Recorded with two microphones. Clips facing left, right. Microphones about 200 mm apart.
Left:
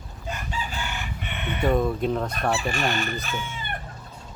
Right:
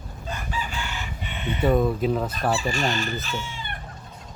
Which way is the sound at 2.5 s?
60° left (ahead or behind).